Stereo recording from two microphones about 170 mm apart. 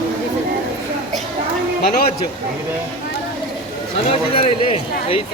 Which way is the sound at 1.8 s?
60° left (ahead or behind).